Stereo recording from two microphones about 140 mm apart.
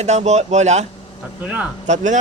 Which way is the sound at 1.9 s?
60° right (ahead or behind).